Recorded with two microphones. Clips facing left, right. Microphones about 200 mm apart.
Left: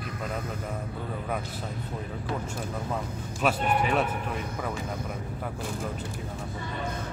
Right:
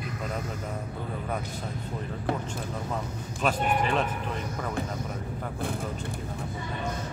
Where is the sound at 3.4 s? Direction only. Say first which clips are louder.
Left 1 dB; 5° left (ahead or behind).